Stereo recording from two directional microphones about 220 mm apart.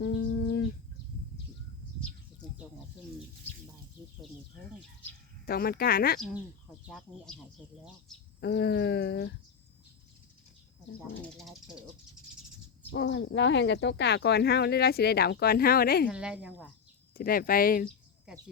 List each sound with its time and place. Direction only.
0.0 s bird: 55° left (ahead or behind)
5.5 s speech: 45° left (ahead or behind)
6.1 s speech: centre (ahead or behind)
8.4 s speech: 50° left (ahead or behind)
11.3 s speech: centre (ahead or behind)
12.9 s speech: 55° left (ahead or behind)
16.0 s speech: 5° right (ahead or behind)
17.2 s speech: 40° left (ahead or behind)
18.3 s speech: 5° right (ahead or behind)